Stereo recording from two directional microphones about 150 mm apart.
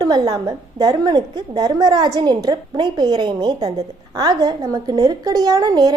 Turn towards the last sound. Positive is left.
turn(degrees=-25)  # may be behind; listen again after turning